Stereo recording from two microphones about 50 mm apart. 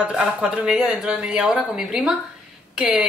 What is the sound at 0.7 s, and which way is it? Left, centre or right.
Speech, centre.